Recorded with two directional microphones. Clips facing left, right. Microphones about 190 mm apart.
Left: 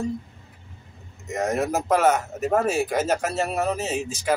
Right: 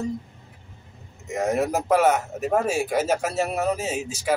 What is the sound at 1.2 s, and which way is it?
Speech, 10° right (ahead or behind).